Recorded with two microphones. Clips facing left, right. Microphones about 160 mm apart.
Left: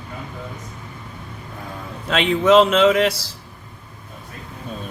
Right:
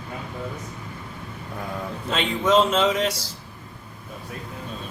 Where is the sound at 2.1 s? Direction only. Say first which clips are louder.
Left 6 dB; 80° left.